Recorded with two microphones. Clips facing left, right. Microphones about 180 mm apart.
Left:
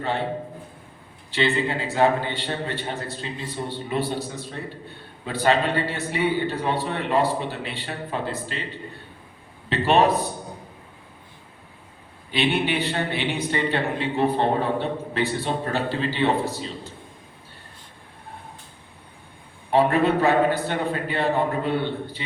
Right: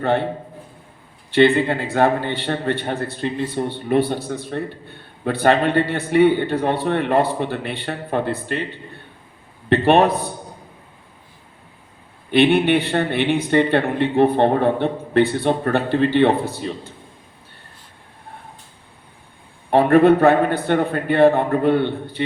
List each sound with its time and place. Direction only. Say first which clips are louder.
1.3 s a man's voice: right 8 dB; 55° right (ahead or behind)
9.6 s a man's voice: right 5 dB; 55° right (ahead or behind)
12.3 s a man's voice: right 8 dB; 60° right (ahead or behind)
19.7 s a man's voice: right 7 dB; 55° right (ahead or behind)